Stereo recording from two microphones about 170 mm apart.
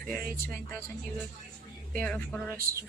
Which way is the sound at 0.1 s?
55° right (ahead or behind).